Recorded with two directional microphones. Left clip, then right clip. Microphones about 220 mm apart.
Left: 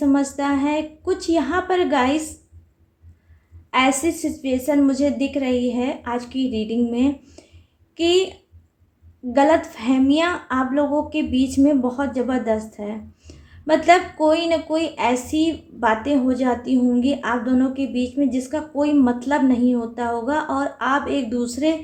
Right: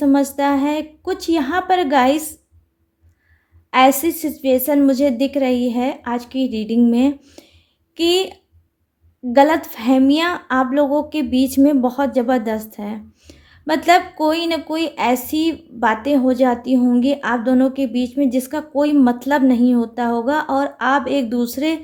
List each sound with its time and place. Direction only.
0.0 s a woman's voice: 45° right (ahead or behind)
3.7 s a woman's voice: 45° right (ahead or behind)
9.3 s a woman's voice: 45° right (ahead or behind)